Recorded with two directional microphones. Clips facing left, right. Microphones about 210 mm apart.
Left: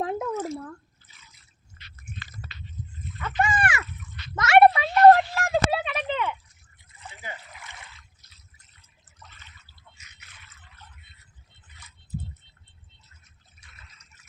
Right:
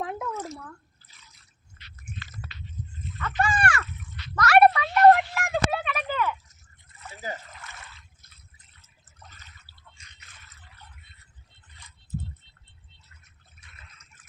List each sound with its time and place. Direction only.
0.0 s drip: 25° left (ahead or behind)
3.2 s a sound: 15° left (ahead or behind)
7.2 s trickle: 40° right (ahead or behind)
7.5 s a sound: 15° left (ahead or behind)
9.2 s water: 40° right (ahead or behind)
9.9 s drip: 5° left (ahead or behind)